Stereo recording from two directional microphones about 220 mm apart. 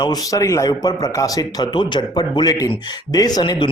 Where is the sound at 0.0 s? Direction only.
15° left (ahead or behind).